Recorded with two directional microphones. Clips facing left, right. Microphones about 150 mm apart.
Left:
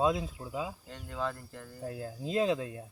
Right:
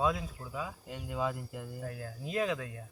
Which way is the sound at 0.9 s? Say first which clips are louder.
Right 2 dB; 10° right (ahead or behind).